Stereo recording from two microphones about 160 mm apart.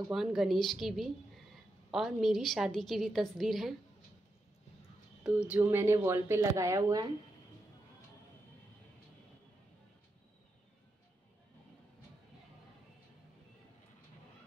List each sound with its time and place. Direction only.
0.1 s a woman's voice: centre (ahead or behind)
5.2 s speech: 10° right (ahead or behind)